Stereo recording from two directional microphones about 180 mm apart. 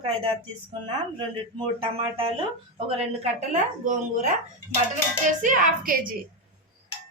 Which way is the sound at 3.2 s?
45° right (ahead or behind).